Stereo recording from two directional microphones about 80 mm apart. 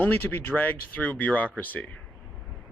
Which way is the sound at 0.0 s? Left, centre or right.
Left.